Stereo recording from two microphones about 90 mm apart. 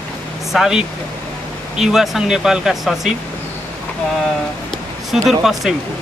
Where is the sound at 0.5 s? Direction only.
5° right (ahead or behind).